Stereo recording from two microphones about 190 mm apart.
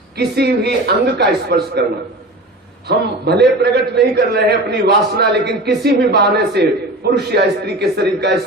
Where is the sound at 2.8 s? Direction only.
60° right (ahead or behind).